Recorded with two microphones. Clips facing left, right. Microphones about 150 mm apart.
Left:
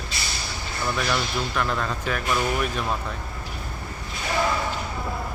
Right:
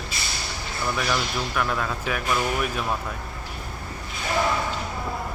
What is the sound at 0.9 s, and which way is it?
Speech, 5° right (ahead or behind).